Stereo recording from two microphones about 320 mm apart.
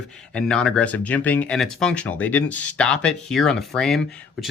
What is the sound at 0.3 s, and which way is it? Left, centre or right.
Speech, centre.